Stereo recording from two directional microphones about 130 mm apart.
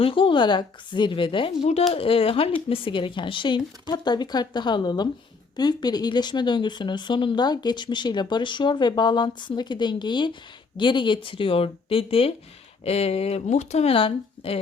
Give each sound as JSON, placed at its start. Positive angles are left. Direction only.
{"t": 0.0, "sound": "speech", "side_deg": 40}